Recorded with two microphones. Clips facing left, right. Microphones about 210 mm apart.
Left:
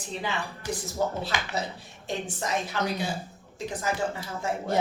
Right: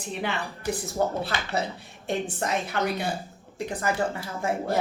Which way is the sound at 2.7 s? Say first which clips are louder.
Right 4 dB; 60° right (ahead or behind).